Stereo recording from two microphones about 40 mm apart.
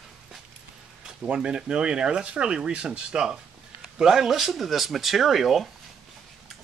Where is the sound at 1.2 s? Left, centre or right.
Right.